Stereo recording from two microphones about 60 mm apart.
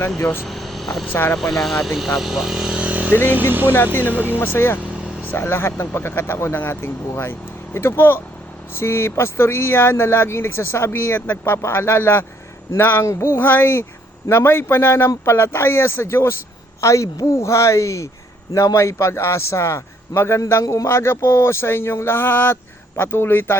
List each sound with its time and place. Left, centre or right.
0.2 s a man's voice: left
0.4 s vehicle: centre
1.0 s a man's voice: left
1.4 s speech: centre; by 3.1 s right
3.1 s a man's voice: left
3.3 s speech: right
4.2 s a man's voice: left
16.8 s a woman's voice: left